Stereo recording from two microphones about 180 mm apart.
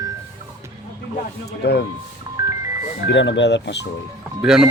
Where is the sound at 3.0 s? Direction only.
80° left.